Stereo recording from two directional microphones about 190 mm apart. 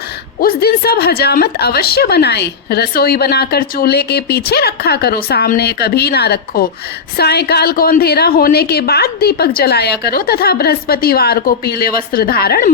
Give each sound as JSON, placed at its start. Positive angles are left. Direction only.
{"t": 0.4, "sound": "a woman's voice", "side_deg": 55}